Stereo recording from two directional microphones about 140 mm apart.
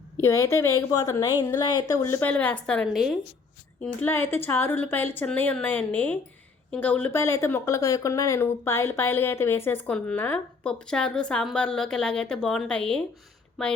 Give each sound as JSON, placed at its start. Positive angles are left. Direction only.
{"t": 0.2, "sound": "a woman's voice", "side_deg": 20}
{"t": 3.8, "sound": "speech", "side_deg": 15}